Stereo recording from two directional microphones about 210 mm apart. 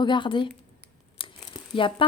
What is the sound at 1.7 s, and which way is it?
Speech, 25° left (ahead or behind).